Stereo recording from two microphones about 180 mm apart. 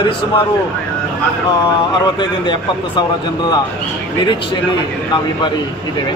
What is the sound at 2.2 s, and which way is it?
Speech, 25° left (ahead or behind).